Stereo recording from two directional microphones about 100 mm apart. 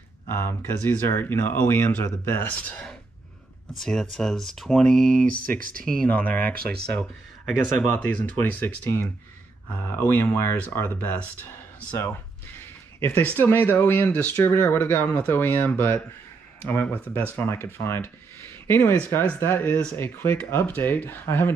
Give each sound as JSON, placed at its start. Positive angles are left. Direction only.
{"t": 0.3, "sound": "speech", "side_deg": 20}
{"t": 2.5, "sound": "speech", "side_deg": 15}